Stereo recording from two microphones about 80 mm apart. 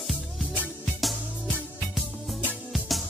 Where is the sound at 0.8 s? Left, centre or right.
Centre.